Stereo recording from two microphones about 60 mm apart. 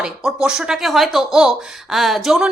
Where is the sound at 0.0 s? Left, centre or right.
Centre.